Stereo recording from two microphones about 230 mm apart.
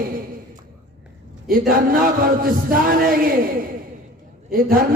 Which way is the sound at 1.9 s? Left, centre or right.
Right.